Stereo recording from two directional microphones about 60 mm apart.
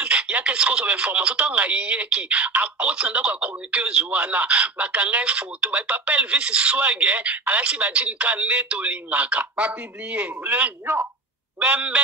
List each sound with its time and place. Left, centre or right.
0.0 s speech: centre